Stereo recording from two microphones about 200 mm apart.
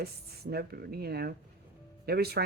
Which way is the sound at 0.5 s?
50° right (ahead or behind).